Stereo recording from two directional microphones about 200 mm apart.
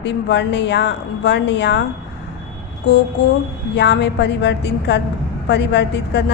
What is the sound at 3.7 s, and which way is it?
A woman's voice, 60° left (ahead or behind).